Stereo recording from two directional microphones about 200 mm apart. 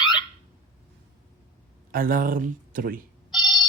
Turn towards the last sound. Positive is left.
turn(degrees=20)  # may be behind; listen again after turning